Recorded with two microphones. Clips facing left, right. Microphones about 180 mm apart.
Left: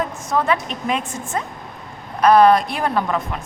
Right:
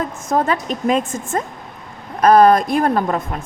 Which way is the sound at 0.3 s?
40° right (ahead or behind).